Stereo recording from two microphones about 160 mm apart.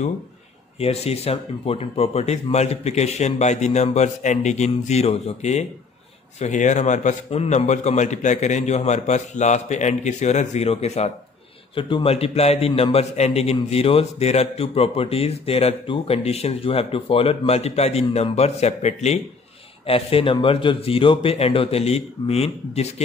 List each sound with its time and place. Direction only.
0.7 s a man's voice: 40° left (ahead or behind)